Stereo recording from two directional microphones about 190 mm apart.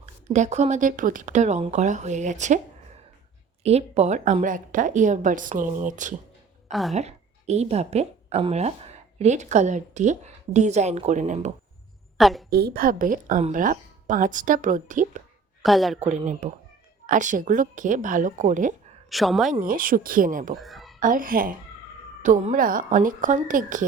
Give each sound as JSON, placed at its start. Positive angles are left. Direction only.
{"t": 0.0, "sound": "speech", "side_deg": -40}
{"t": 3.6, "sound": "speech", "side_deg": -35}
{"t": 6.7, "sound": "speech", "side_deg": 0}
{"t": 6.9, "sound": "a woman's voice", "side_deg": -35}
{"t": 12.1, "sound": "a woman's voice", "side_deg": 0}
{"t": 12.5, "sound": "a woman's voice", "side_deg": -55}
{"t": 15.6, "sound": "speech", "side_deg": 0}
{"t": 16.0, "sound": "a woman's voice", "side_deg": -40}
{"t": 19.1, "sound": "speech", "side_deg": 0}
{"t": 19.5, "sound": "a woman's voice", "side_deg": -45}
{"t": 20.6, "sound": "a woman's voice", "side_deg": 0}
{"t": 21.0, "sound": "a woman's voice", "side_deg": -45}